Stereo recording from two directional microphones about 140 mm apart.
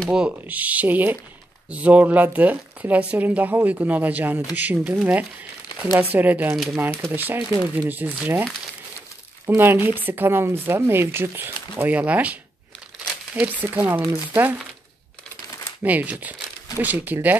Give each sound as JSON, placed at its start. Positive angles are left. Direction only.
{"t": 0.1, "sound": "speech", "side_deg": -10}
{"t": 9.5, "sound": "speech", "side_deg": -15}
{"t": 15.8, "sound": "speech", "side_deg": -10}